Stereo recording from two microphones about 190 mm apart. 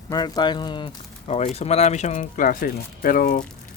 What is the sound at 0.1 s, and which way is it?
Speech, 20° left (ahead or behind).